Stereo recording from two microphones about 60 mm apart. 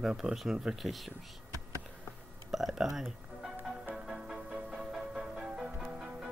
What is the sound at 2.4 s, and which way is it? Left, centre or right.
Speech, centre.